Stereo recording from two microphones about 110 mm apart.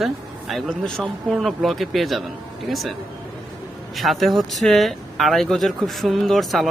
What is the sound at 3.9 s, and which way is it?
Speech, centre (ahead or behind).